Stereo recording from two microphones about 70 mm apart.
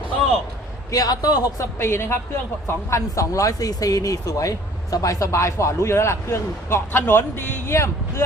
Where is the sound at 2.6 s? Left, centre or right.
Left.